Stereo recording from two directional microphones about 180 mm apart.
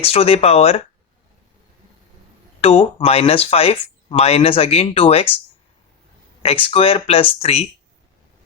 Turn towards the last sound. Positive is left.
turn(degrees=35)  # may be behind; listen again after turning